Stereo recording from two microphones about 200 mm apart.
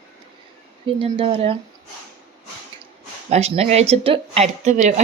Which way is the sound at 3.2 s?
35° right (ahead or behind).